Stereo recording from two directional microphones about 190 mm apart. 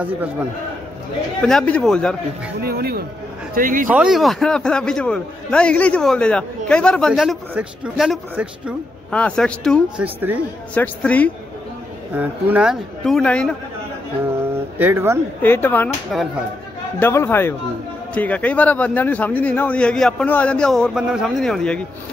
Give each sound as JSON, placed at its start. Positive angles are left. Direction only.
{"t": 1.4, "sound": "a man's voice", "side_deg": 5}
{"t": 2.6, "sound": "speech", "side_deg": -55}
{"t": 3.9, "sound": "a man's voice", "side_deg": -5}
{"t": 10.0, "sound": "speech", "side_deg": -10}
{"t": 10.7, "sound": "a man's voice", "side_deg": 5}
{"t": 12.1, "sound": "a man's voice", "side_deg": -10}
{"t": 14.8, "sound": "speech", "side_deg": -10}
{"t": 15.4, "sound": "a man's voice", "side_deg": 10}
{"t": 16.1, "sound": "a man's voice", "side_deg": 0}
{"t": 17.0, "sound": "a man's voice", "side_deg": 10}